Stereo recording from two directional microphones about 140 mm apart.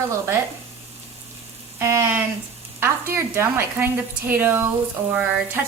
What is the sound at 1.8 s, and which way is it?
A woman's voice, 20° right (ahead or behind).